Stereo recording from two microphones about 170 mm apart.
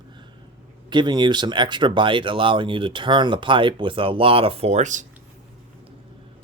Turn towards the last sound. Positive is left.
turn(degrees=-45)  # may be behind; listen again after turning